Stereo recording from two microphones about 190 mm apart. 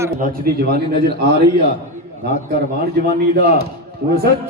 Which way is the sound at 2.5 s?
55° right (ahead or behind).